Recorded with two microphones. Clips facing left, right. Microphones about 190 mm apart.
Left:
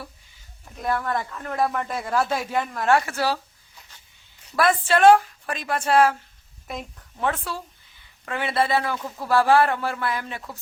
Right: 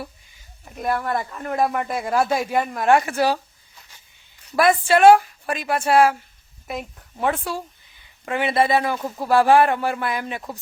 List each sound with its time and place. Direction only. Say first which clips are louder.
0.6 s speech: right 2 dB; 15° right (ahead or behind)
4.5 s speech: right 3 dB; 10° right (ahead or behind)